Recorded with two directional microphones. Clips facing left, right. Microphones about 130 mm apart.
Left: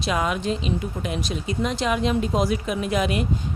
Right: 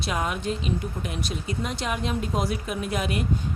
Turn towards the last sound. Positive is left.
turn(degrees=90)